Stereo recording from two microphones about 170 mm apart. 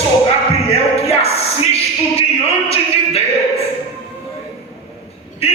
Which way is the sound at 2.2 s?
35° left (ahead or behind).